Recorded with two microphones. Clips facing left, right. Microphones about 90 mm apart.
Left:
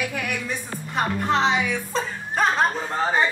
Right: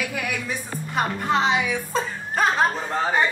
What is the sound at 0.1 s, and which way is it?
Speech, 5° right (ahead or behind).